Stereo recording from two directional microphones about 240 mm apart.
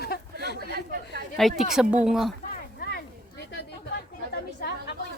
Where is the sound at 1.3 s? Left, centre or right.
Centre.